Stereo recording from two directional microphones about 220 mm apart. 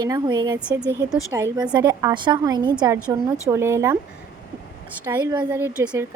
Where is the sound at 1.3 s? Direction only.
15° right (ahead or behind).